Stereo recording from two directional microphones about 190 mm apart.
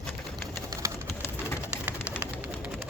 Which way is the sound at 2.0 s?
10° left (ahead or behind).